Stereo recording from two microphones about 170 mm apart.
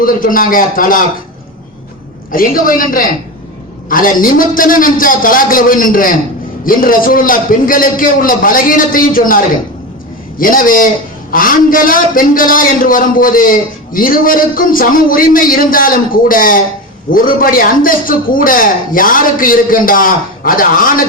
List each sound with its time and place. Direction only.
0.0 s a man's voice: 55° left (ahead or behind)
2.3 s a man's voice: 55° left (ahead or behind)